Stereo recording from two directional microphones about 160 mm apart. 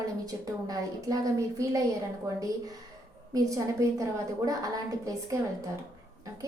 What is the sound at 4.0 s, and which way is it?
A woman's voice, 20° right (ahead or behind).